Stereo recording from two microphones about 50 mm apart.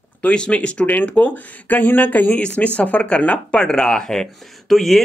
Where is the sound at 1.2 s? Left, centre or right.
Left.